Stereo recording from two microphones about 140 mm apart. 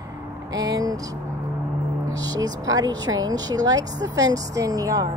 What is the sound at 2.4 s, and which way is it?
Speech, 25° right (ahead or behind).